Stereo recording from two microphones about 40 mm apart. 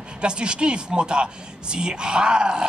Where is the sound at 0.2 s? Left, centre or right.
Right.